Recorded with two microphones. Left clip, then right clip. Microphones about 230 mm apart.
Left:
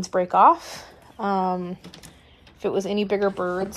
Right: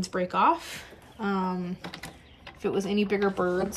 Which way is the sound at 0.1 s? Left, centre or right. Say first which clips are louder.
Left 8 dB; centre.